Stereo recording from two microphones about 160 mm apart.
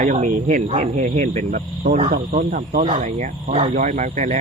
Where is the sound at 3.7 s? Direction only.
55° right (ahead or behind).